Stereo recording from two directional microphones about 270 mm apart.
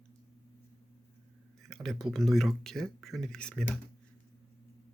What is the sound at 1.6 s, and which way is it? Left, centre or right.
Speech, centre.